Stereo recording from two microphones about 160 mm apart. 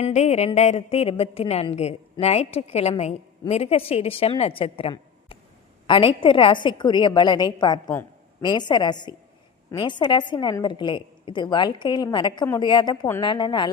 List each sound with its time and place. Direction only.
0.0 s a woman's voice: 45° left (ahead or behind); by 13.7 s 30° left (ahead or behind)